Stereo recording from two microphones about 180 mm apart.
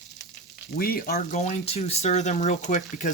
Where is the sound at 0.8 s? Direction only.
55° left (ahead or behind).